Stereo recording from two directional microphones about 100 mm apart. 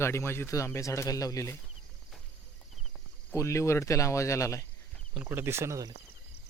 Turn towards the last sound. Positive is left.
turn(degrees=-30)  # may be behind; listen again after turning